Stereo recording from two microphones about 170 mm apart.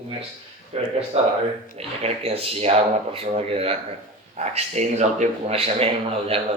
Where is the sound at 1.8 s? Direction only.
35° right (ahead or behind).